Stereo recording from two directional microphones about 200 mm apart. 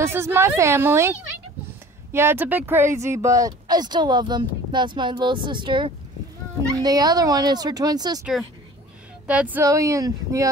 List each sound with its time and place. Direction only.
0.0 s speech: 10° right (ahead or behind)
2.1 s speech: 10° right (ahead or behind)
9.3 s speech: 5° right (ahead or behind)